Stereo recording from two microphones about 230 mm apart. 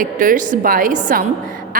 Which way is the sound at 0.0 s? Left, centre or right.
Right.